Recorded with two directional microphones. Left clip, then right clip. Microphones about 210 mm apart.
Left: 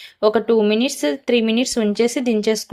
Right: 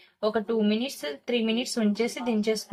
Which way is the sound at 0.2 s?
40° left (ahead or behind).